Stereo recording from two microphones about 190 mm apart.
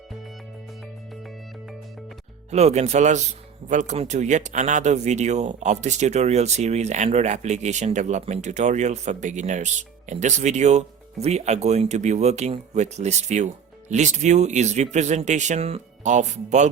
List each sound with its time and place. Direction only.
1.1 s music: centre (ahead or behind)
2.5 s speech: 35° right (ahead or behind)